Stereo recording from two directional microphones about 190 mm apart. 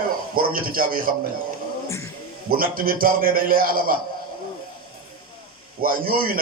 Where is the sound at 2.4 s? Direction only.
50° right (ahead or behind).